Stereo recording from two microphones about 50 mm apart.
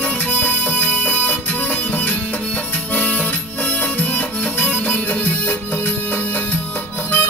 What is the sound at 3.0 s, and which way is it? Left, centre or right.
Music, left.